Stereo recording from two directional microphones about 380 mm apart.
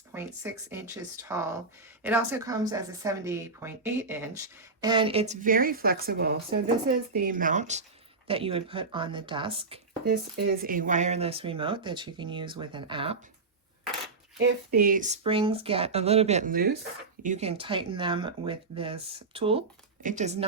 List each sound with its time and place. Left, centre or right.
0.1 s speech: centre
4.8 s speech: centre
14.3 s speech: right